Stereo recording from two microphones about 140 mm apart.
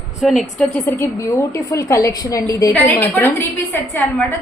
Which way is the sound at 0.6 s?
15° left (ahead or behind).